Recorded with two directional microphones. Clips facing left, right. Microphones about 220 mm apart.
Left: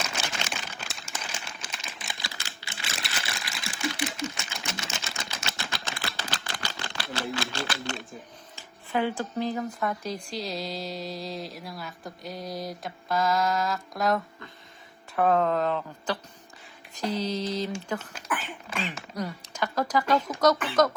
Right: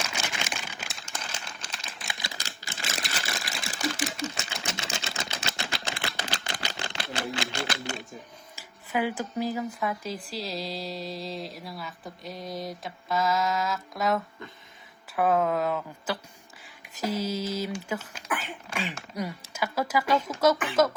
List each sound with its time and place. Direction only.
0.5 s a sound: centre (ahead or behind)
1.7 s typing: centre (ahead or behind)
2.4 s sewing machine: 45° right (ahead or behind)
4.5 s typewriter: 25° right (ahead or behind)
4.9 s camera: 25° right (ahead or behind)
6.1 s typewriter: 20° right (ahead or behind)
8.9 s speech: 10° right (ahead or behind)